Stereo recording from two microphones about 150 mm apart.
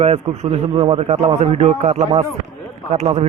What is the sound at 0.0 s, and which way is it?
A man's voice, 45° right (ahead or behind).